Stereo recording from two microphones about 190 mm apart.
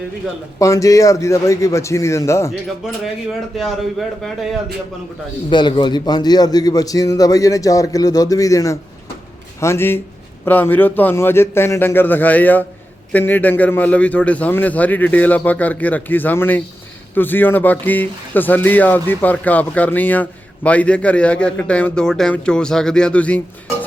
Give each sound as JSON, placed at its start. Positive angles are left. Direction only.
{"t": 0.6, "sound": "a man's voice", "side_deg": 15}
{"t": 3.6, "sound": "a man's voice", "side_deg": 0}
{"t": 5.5, "sound": "a man's voice", "side_deg": 25}